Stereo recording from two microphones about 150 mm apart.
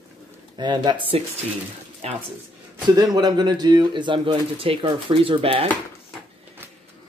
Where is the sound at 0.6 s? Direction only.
30° right (ahead or behind).